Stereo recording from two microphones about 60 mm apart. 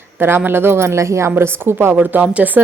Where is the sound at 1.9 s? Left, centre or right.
Right.